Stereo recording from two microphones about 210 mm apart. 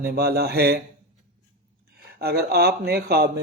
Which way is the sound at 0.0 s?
50° right (ahead or behind).